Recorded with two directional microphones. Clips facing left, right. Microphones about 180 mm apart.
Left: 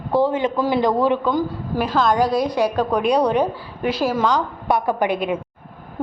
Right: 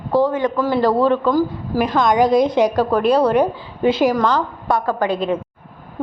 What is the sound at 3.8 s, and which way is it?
Speech, 25° right (ahead or behind).